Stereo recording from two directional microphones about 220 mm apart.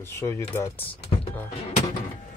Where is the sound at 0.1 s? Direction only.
10° left (ahead or behind).